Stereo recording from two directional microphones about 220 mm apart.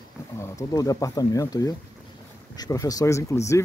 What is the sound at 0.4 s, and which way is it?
Speech, 15° left (ahead or behind).